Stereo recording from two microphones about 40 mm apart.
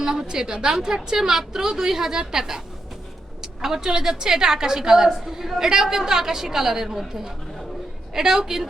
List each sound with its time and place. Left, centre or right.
0.0 s a woman's voice: centre